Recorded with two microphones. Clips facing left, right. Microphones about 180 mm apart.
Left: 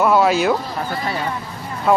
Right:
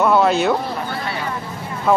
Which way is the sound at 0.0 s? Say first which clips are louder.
Even; 5° left (ahead or behind).